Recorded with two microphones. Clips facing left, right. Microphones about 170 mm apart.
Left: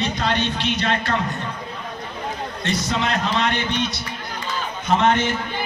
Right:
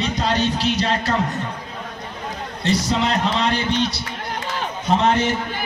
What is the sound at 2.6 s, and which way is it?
A man's voice, 35° right (ahead or behind).